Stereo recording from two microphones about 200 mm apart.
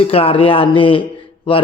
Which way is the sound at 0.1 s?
30° left (ahead or behind).